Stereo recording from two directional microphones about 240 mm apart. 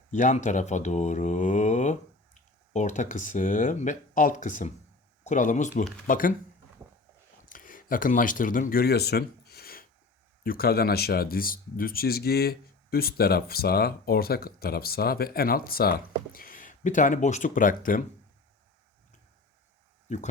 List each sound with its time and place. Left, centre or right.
0.1 s speech: left
7.5 s speech: left
20.1 s speech: left